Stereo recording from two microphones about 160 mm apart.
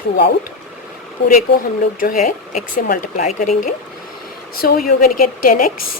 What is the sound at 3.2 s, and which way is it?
Speech, 50° left (ahead or behind).